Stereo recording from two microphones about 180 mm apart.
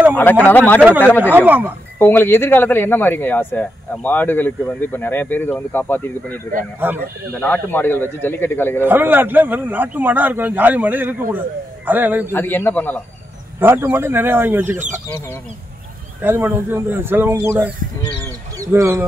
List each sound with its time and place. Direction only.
0.1 s speech: 10° left (ahead or behind)
1.3 s a man's voice: 10° right (ahead or behind)
2.0 s speech: 10° left (ahead or behind)
6.8 s a man's voice: 10° right (ahead or behind)
7.3 s speech: 10° left (ahead or behind)
8.8 s a man's voice: 10° right (ahead or behind)
12.3 s speech: 10° left (ahead or behind)
13.6 s a man's voice: 10° right (ahead or behind)
16.2 s a man's voice: 10° right (ahead or behind)